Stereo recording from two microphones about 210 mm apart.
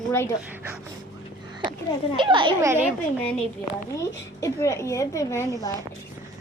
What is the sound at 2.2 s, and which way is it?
Speech, 25° right (ahead or behind).